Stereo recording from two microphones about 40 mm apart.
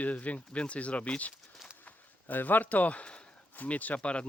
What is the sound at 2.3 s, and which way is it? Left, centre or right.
Speech, left.